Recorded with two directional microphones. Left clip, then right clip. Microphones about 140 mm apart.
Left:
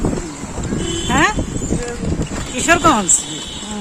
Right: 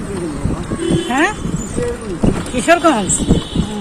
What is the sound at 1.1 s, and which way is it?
Speech, 20° left (ahead or behind).